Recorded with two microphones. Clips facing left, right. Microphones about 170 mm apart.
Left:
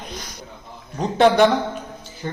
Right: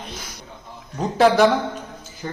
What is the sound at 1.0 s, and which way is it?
Speech, centre (ahead or behind).